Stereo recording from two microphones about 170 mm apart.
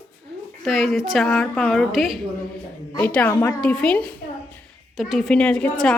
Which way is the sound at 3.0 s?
10° left (ahead or behind).